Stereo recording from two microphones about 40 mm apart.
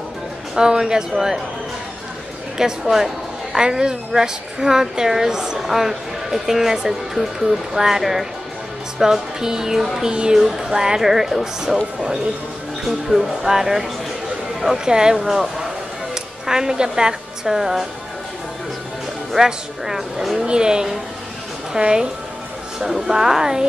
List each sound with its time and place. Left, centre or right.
0.6 s a woman's voice: centre
2.5 s a woman's voice: centre
19.3 s a woman's voice: centre
22.8 s a woman's voice: centre